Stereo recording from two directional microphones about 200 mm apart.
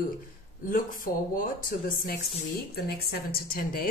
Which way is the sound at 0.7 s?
45° left (ahead or behind).